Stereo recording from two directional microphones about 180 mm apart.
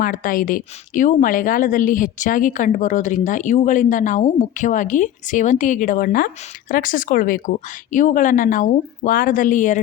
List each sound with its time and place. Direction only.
0.0 s a woman's voice: 50° left (ahead or behind)